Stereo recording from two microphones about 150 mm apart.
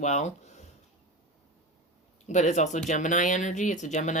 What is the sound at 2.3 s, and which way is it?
Speech, 55° left (ahead or behind).